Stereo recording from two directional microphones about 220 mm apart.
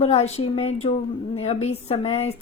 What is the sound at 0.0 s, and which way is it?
A woman's voice, 30° left (ahead or behind).